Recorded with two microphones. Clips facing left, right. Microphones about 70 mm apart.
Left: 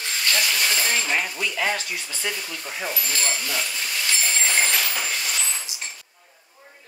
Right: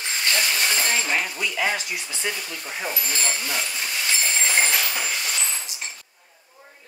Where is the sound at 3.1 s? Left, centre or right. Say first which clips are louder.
Even; right.